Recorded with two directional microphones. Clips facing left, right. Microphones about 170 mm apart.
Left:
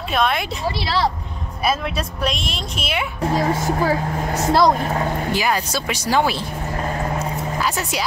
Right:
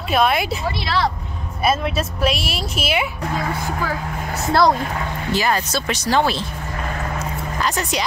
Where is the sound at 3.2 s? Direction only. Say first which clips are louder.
Left 4 dB; 30° left (ahead or behind).